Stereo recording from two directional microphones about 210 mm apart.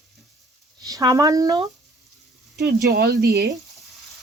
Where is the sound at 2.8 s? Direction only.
50° right (ahead or behind).